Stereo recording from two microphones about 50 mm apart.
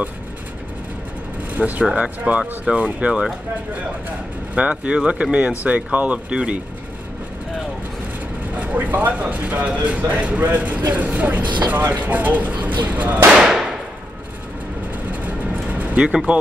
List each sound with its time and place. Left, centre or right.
1.5 s speech: right
4.6 s speech: right
8.5 s speech: right
13.4 s whip: centre
15.0 s vehicle: right
16.3 s speech: right